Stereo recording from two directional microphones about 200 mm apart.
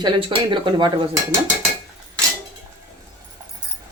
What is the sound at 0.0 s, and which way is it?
Dishes, 25° right (ahead or behind).